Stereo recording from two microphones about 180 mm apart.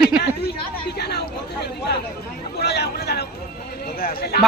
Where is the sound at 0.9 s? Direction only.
65° left (ahead or behind).